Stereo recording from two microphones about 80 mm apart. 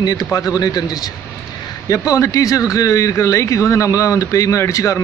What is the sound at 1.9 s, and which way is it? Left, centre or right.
Speech, left.